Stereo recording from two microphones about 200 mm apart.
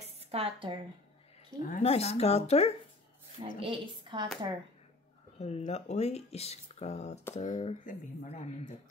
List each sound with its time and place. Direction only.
0.0 s a sound: 30° right (ahead or behind)
1.6 s speech: 40° left (ahead or behind)
1.9 s speech: 30° left (ahead or behind)
3.5 s a woman's voice: 25° right (ahead or behind)
5.4 s speech: 35° left (ahead or behind)